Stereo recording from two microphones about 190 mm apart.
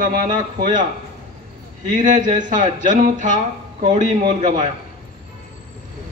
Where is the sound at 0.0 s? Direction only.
50° right (ahead or behind).